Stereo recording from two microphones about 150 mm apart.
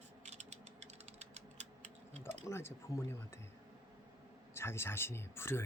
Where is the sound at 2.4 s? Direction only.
15° left (ahead or behind).